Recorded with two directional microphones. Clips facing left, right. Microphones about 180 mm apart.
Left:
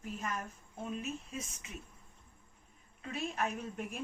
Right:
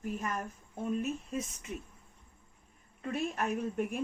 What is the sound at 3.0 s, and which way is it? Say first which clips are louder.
Speech: right 3 dB; 50° right (ahead or behind).